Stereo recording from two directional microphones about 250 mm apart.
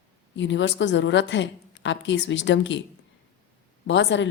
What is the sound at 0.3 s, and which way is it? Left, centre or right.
A woman's voice, left.